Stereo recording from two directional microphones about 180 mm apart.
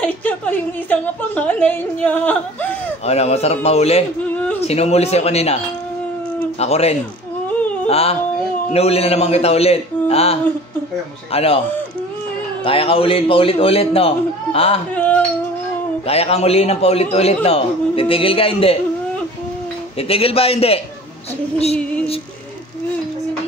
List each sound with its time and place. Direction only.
0.0 s a woman's voice: 10° left (ahead or behind)
3.1 s a man's voice: 35° left (ahead or behind)
6.6 s a man's voice: 35° left (ahead or behind)
12.6 s a man's voice: 30° left (ahead or behind)
16.1 s a man's voice: 35° left (ahead or behind)
20.0 s a man's voice: 30° left (ahead or behind)